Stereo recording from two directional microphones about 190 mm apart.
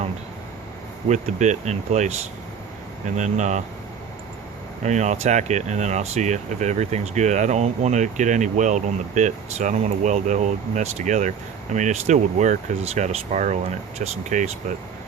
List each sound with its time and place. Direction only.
1.0 s speech: 40° right (ahead or behind)
3.2 s speech: 40° right (ahead or behind)
4.8 s speech: 40° right (ahead or behind)